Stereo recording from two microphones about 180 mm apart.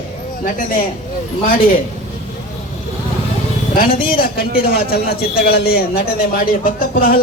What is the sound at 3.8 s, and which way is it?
A man's voice, 55° left (ahead or behind).